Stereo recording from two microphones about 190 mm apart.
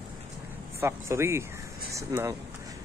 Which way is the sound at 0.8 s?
15° right (ahead or behind).